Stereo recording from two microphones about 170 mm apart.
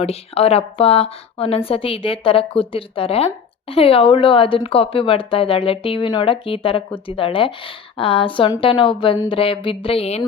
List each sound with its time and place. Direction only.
0.0 s speech: 35° left (ahead or behind)